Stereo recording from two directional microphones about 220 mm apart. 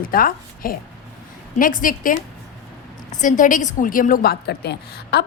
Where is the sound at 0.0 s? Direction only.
40° left (ahead or behind).